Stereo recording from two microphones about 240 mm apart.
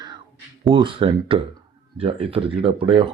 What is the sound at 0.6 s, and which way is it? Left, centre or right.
Speech, centre.